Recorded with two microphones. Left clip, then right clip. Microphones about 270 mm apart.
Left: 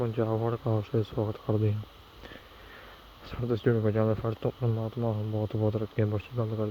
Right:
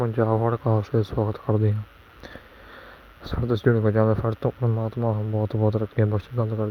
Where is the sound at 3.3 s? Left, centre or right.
Right.